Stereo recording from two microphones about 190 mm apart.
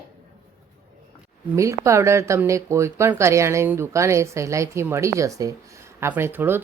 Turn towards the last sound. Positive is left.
turn(degrees=-10)  # may be behind; listen again after turning